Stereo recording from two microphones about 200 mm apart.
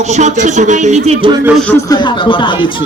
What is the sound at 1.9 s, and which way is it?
Speech, 25° left (ahead or behind).